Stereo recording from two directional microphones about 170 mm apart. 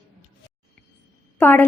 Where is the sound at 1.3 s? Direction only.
10° left (ahead or behind).